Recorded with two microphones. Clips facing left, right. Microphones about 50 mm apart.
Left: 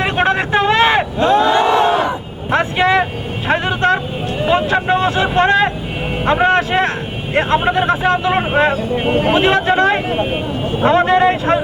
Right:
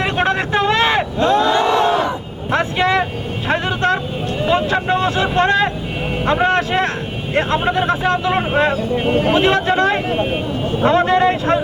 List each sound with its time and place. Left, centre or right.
0.0 s battle cry: centre
4.4 s vehicle: left
7.3 s a sound: centre